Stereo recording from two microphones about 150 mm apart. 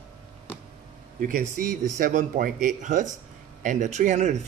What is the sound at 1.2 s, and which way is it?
Speech, 65° right (ahead or behind).